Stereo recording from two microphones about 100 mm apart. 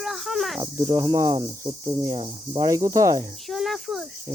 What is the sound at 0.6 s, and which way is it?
Speech, 30° right (ahead or behind).